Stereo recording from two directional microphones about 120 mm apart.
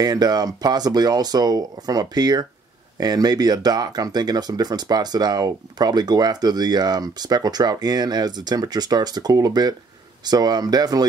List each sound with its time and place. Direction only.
0.0 s speech: 35° right (ahead or behind)